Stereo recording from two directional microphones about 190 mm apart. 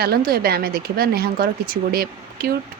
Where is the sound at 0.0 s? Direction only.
55° right (ahead or behind).